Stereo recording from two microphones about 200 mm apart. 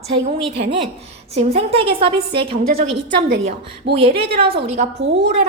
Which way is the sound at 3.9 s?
30° right (ahead or behind).